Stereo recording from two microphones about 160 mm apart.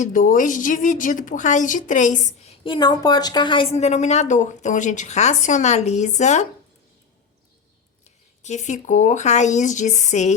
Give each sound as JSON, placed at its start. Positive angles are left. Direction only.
{"t": 0.0, "sound": "a woman's voice", "side_deg": 55}
{"t": 2.7, "sound": "a woman's voice", "side_deg": 25}
{"t": 8.0, "sound": "a woman's voice", "side_deg": 45}